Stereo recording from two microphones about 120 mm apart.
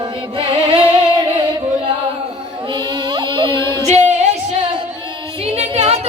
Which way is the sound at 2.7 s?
40° right (ahead or behind).